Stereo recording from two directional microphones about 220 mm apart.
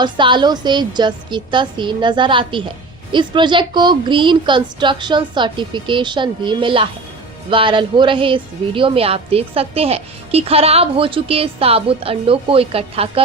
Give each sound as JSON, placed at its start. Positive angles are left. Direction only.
{"t": 0.0, "sound": "a woman's voice", "side_deg": -20}